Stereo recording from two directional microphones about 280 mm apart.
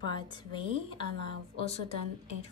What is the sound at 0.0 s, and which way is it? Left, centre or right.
A woman's voice, centre.